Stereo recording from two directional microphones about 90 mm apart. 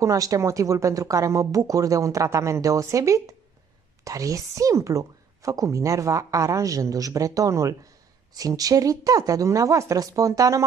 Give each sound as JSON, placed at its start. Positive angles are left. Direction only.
{"t": 0.0, "sound": "a woman's voice", "side_deg": -40}